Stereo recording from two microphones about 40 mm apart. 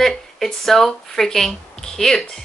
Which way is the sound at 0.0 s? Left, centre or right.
Centre.